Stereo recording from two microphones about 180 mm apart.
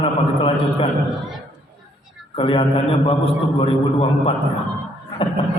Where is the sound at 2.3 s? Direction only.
30° left (ahead or behind).